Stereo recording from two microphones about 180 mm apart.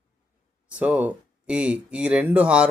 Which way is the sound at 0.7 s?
5° right (ahead or behind).